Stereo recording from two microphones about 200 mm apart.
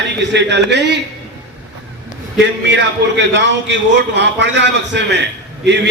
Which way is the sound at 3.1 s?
65° right (ahead or behind).